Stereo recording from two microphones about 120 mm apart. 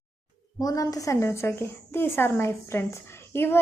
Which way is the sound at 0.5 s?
30° left (ahead or behind).